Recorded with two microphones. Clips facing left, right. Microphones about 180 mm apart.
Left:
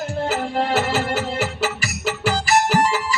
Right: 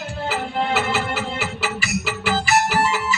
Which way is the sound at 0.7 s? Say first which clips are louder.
Left 2 dB; 40° left (ahead or behind).